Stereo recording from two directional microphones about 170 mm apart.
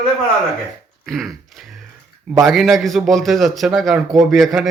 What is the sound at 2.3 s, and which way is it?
A man's voice, centre (ahead or behind).